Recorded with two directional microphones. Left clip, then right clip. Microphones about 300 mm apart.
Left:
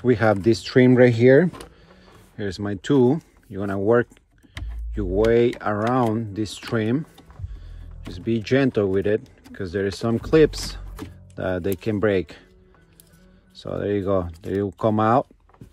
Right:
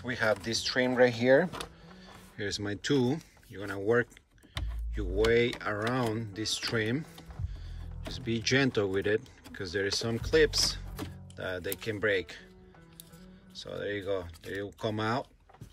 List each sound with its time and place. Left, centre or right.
0.0 s speech: centre
2.3 s speech: centre
13.6 s speech: centre